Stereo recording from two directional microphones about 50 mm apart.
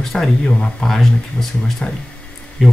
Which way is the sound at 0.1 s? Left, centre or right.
Centre.